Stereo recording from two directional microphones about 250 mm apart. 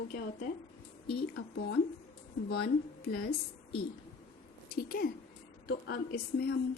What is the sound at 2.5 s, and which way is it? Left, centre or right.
Speech, left.